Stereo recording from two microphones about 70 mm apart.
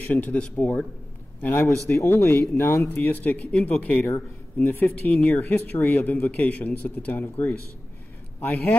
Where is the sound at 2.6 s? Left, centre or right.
Left.